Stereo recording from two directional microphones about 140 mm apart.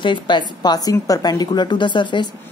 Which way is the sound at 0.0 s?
35° left (ahead or behind).